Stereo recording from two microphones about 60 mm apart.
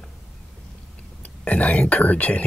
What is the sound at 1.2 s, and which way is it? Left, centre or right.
Speech, left.